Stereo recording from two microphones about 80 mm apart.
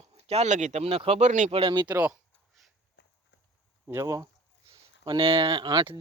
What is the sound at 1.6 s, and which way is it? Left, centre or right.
Speech, right.